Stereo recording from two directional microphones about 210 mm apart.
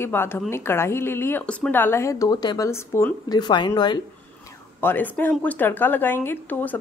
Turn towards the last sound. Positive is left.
turn(degrees=10)  # may be behind; listen again after turning